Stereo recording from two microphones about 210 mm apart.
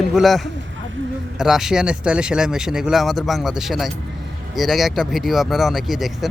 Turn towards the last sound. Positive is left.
turn(degrees=0)  # may be behind; listen again after turning